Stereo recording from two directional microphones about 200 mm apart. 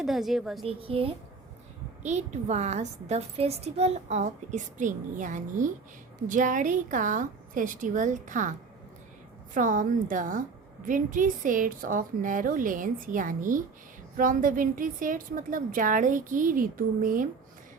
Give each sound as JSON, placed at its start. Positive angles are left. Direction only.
{"t": 0.0, "sound": "a woman's voice", "side_deg": 0}
{"t": 0.6, "sound": "a woman's voice", "side_deg": -30}
{"t": 9.6, "sound": "a woman's voice", "side_deg": -40}